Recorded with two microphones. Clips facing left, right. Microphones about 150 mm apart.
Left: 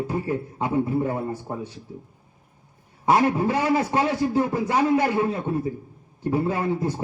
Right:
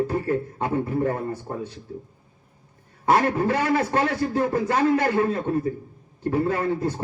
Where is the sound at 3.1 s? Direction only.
20° left (ahead or behind).